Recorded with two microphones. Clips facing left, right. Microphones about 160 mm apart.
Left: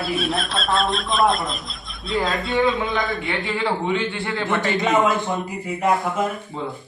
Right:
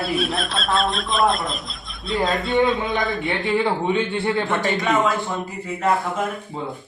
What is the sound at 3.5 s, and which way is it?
A man's voice, 20° right (ahead or behind).